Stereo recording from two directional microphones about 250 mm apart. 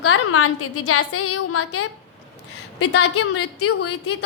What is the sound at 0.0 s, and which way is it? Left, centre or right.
A woman's voice, left.